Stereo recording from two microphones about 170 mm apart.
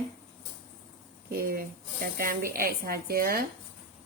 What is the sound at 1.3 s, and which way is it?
A woman's voice, 60° right (ahead or behind).